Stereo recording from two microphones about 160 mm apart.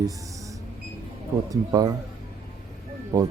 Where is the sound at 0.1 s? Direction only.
20° right (ahead or behind).